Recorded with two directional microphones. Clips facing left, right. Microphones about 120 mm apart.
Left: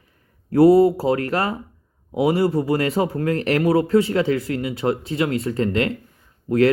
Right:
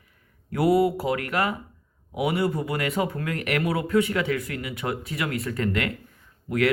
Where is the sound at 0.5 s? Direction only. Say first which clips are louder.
Left 8 dB; 30° left (ahead or behind).